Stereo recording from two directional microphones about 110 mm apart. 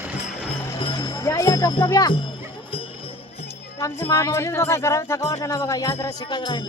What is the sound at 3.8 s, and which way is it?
Speech, 25° left (ahead or behind).